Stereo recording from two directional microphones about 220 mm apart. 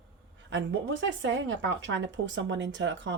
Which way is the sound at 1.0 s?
60° right (ahead or behind).